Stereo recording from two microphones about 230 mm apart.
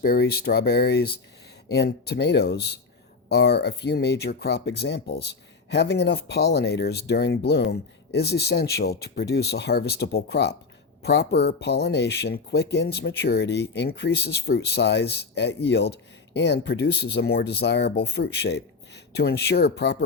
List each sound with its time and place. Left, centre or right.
0.0 s speech: left